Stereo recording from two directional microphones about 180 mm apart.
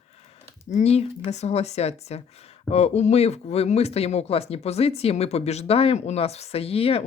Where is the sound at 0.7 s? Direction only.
35° left (ahead or behind).